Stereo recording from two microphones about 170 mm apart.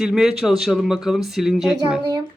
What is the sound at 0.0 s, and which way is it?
Speech, 5° right (ahead or behind).